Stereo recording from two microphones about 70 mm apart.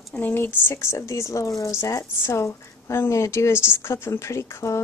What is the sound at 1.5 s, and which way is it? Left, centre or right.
A woman's voice, left.